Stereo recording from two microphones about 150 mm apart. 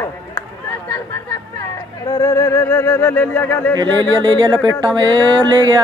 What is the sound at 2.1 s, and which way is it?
Music, 25° left (ahead or behind).